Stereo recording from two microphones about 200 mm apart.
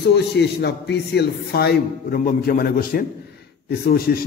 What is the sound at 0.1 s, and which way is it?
A man's voice, 55° left (ahead or behind).